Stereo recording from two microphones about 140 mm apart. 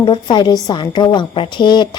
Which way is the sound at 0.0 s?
30° left (ahead or behind).